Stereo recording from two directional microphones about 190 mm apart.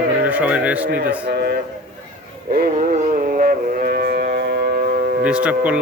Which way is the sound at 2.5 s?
50° right (ahead or behind).